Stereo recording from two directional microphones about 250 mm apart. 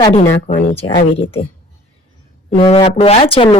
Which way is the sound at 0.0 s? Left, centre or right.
Left.